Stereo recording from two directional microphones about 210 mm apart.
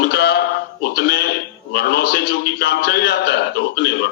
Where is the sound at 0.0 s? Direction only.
50° left (ahead or behind).